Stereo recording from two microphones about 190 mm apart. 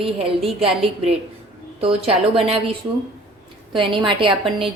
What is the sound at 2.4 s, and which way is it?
A woman's voice, 30° right (ahead or behind).